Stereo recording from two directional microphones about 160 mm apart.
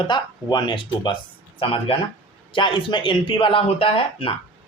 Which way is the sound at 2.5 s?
30° left (ahead or behind).